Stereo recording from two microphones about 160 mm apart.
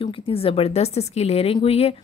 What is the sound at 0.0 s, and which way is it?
Speech, 35° left (ahead or behind).